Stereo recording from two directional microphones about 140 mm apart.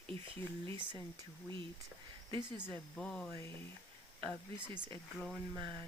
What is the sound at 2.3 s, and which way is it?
Speech, 30° right (ahead or behind).